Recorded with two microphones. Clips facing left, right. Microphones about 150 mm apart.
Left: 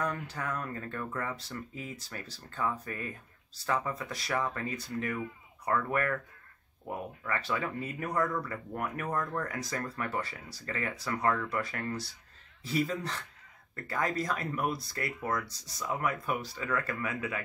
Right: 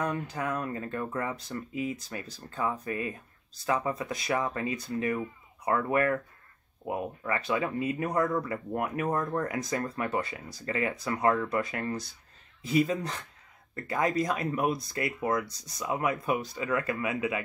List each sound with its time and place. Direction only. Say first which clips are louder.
0.0 s speech: right 3 dB; 15° right (ahead or behind)